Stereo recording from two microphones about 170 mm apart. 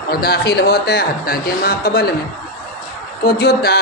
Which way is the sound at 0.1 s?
65° left (ahead or behind).